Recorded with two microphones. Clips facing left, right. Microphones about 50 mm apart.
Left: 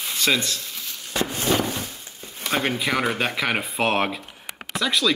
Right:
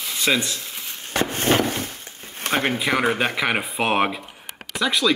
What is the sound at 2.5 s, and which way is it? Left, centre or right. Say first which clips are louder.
Speech: right 2 dB; centre.